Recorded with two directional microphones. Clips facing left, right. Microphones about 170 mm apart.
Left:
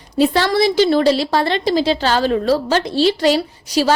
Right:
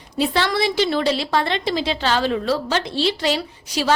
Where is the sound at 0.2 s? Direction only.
40° left (ahead or behind).